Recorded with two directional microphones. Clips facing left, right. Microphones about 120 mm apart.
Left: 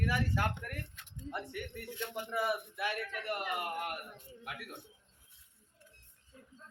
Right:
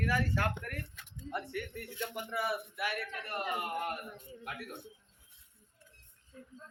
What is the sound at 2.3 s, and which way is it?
Speech, 20° left (ahead or behind).